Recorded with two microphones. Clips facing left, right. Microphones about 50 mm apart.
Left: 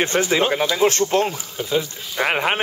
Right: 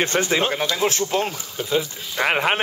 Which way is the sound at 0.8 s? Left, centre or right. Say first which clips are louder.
Left 5 dB; centre.